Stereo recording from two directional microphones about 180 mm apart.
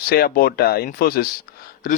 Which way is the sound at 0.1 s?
60° left (ahead or behind).